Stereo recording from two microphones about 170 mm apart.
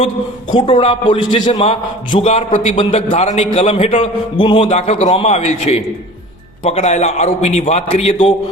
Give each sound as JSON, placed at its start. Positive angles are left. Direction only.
{"t": 0.5, "sound": "a man's voice", "side_deg": 30}